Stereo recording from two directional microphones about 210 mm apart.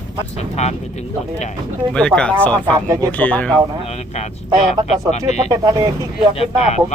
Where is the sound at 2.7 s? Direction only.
15° right (ahead or behind).